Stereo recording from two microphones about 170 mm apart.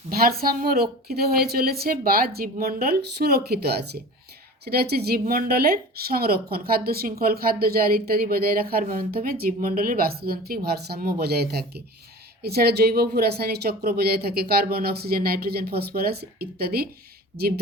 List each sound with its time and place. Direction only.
0.1 s a woman's voice: 60° right (ahead or behind)